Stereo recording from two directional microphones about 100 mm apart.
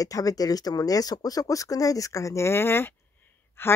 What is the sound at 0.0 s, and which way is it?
Speech, 35° left (ahead or behind).